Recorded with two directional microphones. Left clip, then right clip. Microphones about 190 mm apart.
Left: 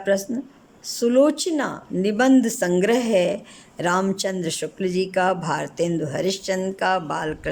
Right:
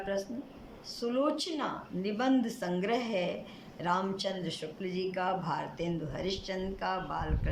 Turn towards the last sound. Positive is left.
turn(degrees=60)  # may be behind; listen again after turning